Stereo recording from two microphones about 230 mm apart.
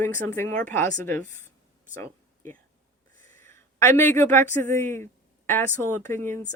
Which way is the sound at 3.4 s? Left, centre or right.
Centre.